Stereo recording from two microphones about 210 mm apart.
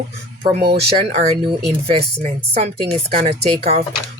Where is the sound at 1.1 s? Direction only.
30° right (ahead or behind).